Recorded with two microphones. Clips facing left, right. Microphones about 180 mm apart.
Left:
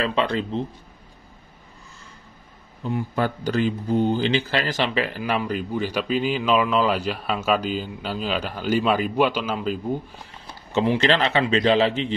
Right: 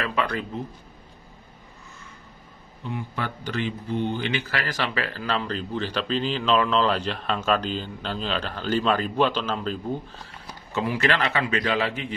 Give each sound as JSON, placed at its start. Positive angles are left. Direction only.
{"t": 0.0, "sound": "speech", "side_deg": 25}
{"t": 2.8, "sound": "speech", "side_deg": 40}
{"t": 10.4, "sound": "a man's voice", "side_deg": 25}